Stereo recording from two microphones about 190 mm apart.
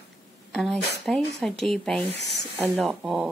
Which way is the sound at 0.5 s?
5° left (ahead or behind).